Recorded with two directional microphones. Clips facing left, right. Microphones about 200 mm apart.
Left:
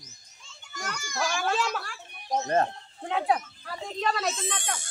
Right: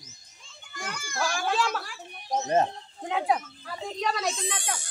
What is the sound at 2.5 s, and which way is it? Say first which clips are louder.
A child's voice: right 2 dB; 15° right (ahead or behind).